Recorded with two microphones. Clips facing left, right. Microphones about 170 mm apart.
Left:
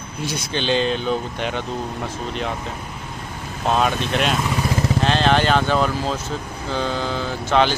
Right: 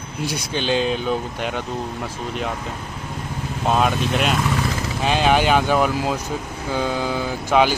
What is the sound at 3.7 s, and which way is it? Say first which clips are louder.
Speech: even; centre (ahead or behind).